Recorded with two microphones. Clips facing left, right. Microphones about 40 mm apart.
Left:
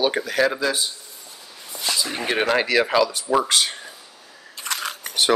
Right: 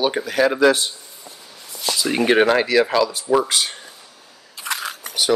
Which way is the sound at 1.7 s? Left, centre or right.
Left.